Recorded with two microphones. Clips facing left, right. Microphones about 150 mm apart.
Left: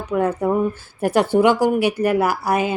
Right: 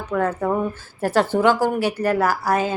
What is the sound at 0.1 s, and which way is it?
A woman's voice, 15° left (ahead or behind).